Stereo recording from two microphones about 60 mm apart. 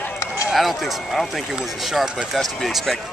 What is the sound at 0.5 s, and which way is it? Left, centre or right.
Speech, centre.